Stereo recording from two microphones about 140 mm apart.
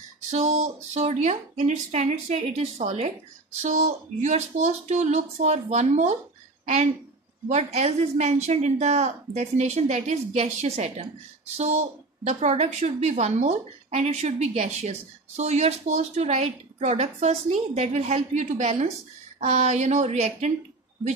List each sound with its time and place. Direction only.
0.3 s a woman's voice: 55° right (ahead or behind)
7.4 s a woman's voice: 50° right (ahead or behind)